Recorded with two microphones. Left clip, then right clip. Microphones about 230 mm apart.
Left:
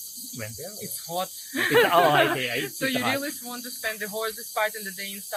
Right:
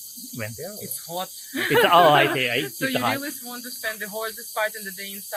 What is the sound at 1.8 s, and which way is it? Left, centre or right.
Speech, right.